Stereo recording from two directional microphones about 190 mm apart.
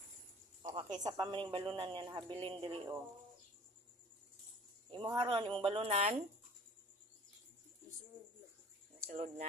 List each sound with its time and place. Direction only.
0.6 s cricket: 20° right (ahead or behind)
1.0 s speech: 20° right (ahead or behind)
4.9 s speech: 25° right (ahead or behind)
9.0 s speech: 35° right (ahead or behind)